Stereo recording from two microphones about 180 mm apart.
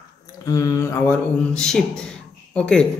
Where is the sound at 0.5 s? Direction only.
20° left (ahead or behind).